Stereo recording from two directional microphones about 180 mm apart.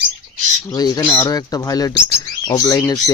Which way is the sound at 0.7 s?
20° left (ahead or behind).